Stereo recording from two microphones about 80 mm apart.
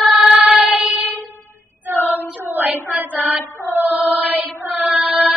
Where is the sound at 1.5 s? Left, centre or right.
Right.